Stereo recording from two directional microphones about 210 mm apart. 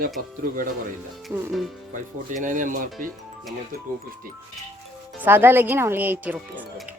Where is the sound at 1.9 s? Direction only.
35° right (ahead or behind).